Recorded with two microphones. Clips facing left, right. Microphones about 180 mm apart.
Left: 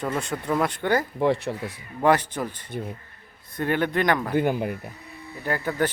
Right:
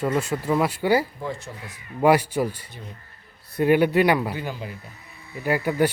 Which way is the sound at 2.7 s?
55° left (ahead or behind).